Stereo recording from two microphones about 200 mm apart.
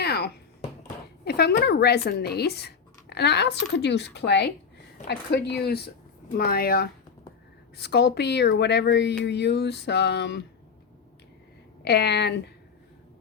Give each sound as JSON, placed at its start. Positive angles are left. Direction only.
{"t": 0.0, "sound": "a sound", "side_deg": 55}
{"t": 1.2, "sound": "speech", "side_deg": 55}
{"t": 11.9, "sound": "speech", "side_deg": 55}